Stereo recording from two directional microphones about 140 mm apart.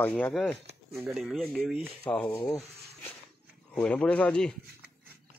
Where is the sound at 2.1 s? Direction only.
20° left (ahead or behind).